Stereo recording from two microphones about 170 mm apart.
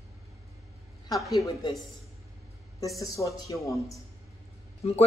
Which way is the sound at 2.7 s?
20° left (ahead or behind).